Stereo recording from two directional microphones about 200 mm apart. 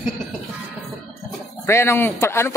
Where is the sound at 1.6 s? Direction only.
15° left (ahead or behind).